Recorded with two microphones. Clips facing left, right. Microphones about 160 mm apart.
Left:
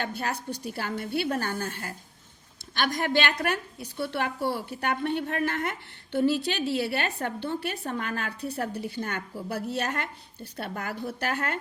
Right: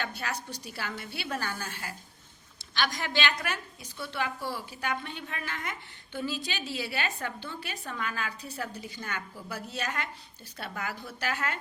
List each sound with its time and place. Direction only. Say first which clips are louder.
0.0 s a woman's voice: left 4 dB; 50° left (ahead or behind)